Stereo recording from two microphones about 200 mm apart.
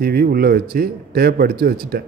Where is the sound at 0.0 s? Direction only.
50° right (ahead or behind).